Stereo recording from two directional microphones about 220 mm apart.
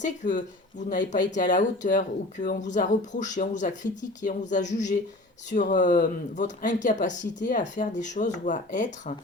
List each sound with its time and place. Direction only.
0.0 s speech: 35° left (ahead or behind)